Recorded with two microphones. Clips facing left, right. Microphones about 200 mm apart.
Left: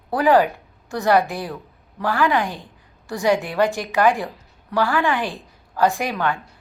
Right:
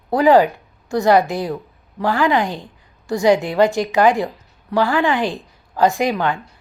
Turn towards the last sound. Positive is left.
turn(degrees=-15)  # may be behind; listen again after turning